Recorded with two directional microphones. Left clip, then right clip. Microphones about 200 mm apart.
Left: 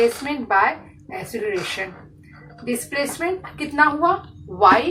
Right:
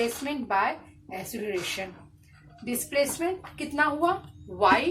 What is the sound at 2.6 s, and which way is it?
Speech, 45° right (ahead or behind).